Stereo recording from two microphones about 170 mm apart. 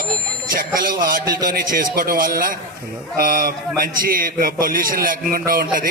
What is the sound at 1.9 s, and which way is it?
A man's voice, 55° right (ahead or behind).